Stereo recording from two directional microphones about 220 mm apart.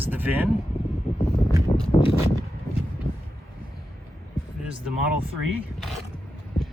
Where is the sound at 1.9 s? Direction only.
25° left (ahead or behind).